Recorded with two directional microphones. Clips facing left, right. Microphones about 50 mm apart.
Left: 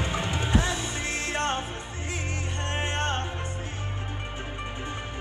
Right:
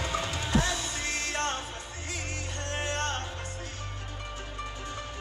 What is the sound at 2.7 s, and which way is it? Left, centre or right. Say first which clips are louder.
Music: left 3 dB; left.